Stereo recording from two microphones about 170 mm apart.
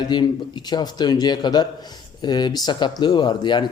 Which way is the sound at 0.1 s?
25° left (ahead or behind).